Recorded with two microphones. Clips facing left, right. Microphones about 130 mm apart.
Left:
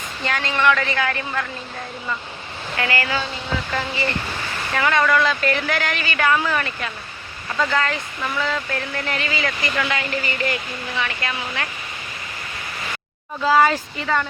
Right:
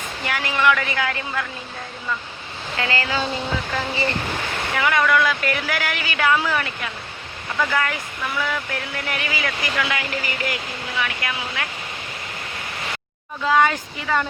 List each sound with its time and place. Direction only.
0.3 s speech: 15° right (ahead or behind)
2.7 s speech: 20° right (ahead or behind)
4.7 s speech: 10° right (ahead or behind)
13.4 s speech: 5° left (ahead or behind)